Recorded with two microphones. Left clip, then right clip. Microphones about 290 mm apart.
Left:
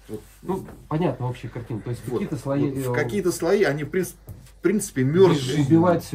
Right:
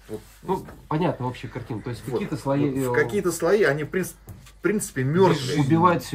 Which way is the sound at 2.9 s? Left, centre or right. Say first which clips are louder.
Right 2 dB; centre.